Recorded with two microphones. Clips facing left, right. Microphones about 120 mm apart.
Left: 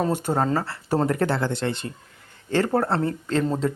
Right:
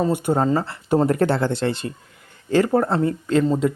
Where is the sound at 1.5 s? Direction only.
20° left (ahead or behind).